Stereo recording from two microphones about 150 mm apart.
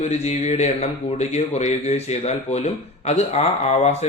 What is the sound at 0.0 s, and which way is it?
Speech, 45° left (ahead or behind).